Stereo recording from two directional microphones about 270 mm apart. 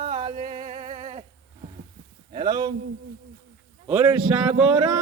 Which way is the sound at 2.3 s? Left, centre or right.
Centre.